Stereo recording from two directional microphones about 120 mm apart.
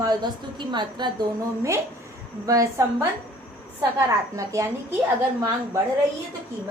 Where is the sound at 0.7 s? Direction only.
40° right (ahead or behind).